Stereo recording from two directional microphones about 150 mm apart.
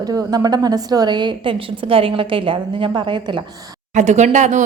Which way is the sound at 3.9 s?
50° right (ahead or behind).